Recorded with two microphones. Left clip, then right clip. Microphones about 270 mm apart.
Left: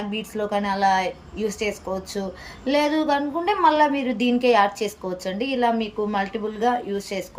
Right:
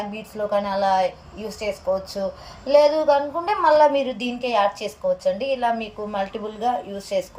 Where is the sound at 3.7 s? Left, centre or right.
Left.